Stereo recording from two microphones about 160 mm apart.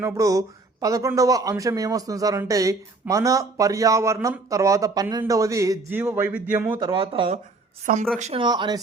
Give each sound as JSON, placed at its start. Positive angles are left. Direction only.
{"t": 0.0, "sound": "a man's voice", "side_deg": -20}
{"t": 6.7, "sound": "speech", "side_deg": -30}
{"t": 7.9, "sound": "speech", "side_deg": -55}
{"t": 8.2, "sound": "speech", "side_deg": -40}
{"t": 8.4, "sound": "speech", "side_deg": -25}